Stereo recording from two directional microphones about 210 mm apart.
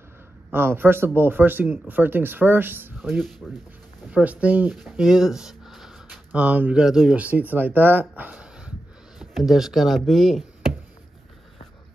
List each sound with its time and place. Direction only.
0.5 s speech: 10° right (ahead or behind)
3.2 s speech: centre (ahead or behind)